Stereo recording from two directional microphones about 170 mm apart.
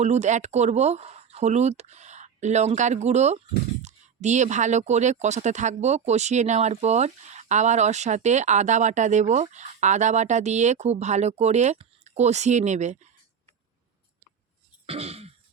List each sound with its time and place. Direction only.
0.0 s speech: 40° right (ahead or behind)
14.8 s throat clearing: 35° right (ahead or behind)